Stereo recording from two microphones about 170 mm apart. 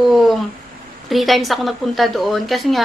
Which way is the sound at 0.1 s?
Centre (ahead or behind).